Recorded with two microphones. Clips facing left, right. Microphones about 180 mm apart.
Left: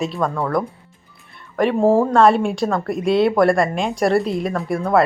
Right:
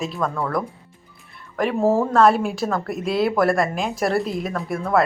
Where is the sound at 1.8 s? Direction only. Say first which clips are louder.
Left 3 dB; 30° left (ahead or behind).